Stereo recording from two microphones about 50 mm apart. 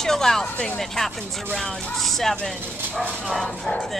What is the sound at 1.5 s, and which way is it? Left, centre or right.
Dog, centre.